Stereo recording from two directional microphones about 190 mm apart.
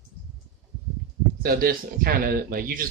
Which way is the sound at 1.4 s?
50° right (ahead or behind).